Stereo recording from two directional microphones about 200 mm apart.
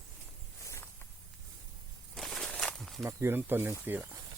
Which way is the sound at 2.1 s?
Centre (ahead or behind).